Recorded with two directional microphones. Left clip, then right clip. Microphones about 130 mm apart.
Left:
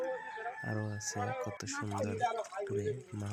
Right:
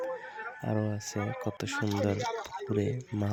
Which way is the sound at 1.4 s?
70° right (ahead or behind).